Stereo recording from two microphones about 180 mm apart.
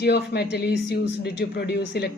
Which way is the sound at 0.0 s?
65° left (ahead or behind).